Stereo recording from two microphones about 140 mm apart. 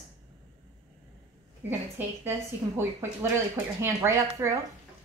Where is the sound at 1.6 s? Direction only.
15° right (ahead or behind).